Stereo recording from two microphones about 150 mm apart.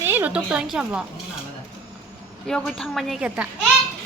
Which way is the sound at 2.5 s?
5° left (ahead or behind).